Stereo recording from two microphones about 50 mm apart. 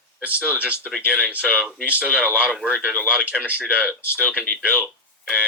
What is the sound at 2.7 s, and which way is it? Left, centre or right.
A woman's voice, right.